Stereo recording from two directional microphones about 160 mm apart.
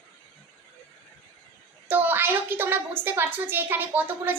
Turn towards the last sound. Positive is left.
turn(degrees=-10)  # may be behind; listen again after turning